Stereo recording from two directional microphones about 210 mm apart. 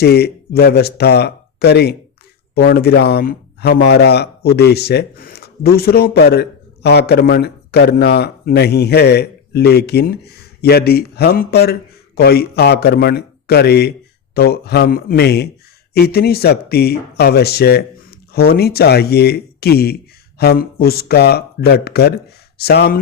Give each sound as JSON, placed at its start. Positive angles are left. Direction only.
{"t": 0.0, "sound": "speech", "side_deg": 50}